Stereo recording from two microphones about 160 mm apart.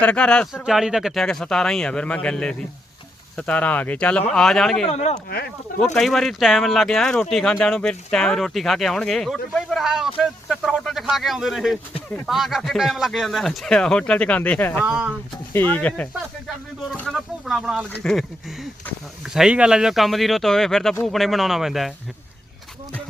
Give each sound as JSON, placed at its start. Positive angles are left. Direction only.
{"t": 0.0, "sound": "speech", "side_deg": 5}
{"t": 4.9, "sound": "speech", "side_deg": 45}
{"t": 5.8, "sound": "speech", "side_deg": 5}
{"t": 14.8, "sound": "speech", "side_deg": -5}
{"t": 15.5, "sound": "speech", "side_deg": 10}
{"t": 16.9, "sound": "a sound", "side_deg": 0}
{"t": 17.9, "sound": "speech", "side_deg": 5}